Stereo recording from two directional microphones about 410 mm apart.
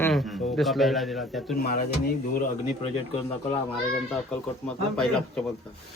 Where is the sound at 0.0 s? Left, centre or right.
Centre.